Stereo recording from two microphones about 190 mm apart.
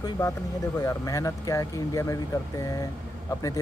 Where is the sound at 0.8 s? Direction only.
20° left (ahead or behind).